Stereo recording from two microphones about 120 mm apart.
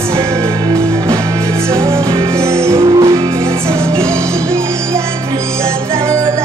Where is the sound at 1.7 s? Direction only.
25° right (ahead or behind).